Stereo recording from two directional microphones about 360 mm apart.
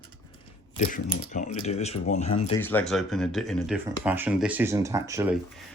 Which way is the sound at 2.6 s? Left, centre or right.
Centre.